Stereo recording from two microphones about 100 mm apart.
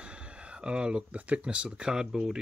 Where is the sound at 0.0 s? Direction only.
10° right (ahead or behind).